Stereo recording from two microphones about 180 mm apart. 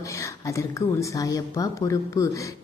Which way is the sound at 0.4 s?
15° left (ahead or behind).